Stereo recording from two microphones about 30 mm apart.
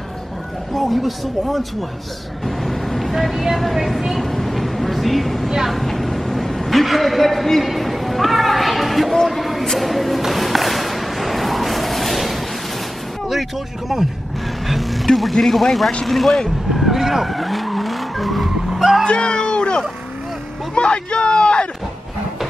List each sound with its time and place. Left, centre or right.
0.7 s speech: centre
2.4 s vehicle: centre
3.6 s speech: centre
4.2 s vehicle: centre
5.7 s a sound: centre
7.6 s a sound: centre
13.3 s speech: centre
16.1 s vehicle: centre
19.0 s music: left
20.7 s speech: left